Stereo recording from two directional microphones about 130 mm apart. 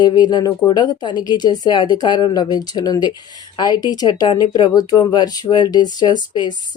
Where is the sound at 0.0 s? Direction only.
35° left (ahead or behind).